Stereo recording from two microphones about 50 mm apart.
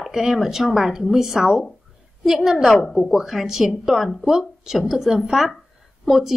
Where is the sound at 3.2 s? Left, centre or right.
Centre.